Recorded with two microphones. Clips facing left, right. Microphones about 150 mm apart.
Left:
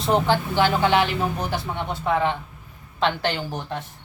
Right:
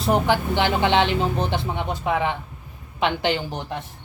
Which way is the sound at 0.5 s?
20° right (ahead or behind).